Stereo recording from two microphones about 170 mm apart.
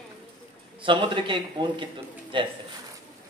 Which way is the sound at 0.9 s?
30° right (ahead or behind).